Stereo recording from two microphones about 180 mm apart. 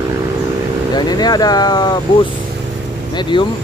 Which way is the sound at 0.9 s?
20° left (ahead or behind).